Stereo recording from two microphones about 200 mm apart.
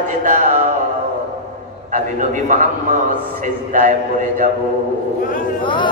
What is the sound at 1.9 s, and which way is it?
A man's voice, 40° right (ahead or behind).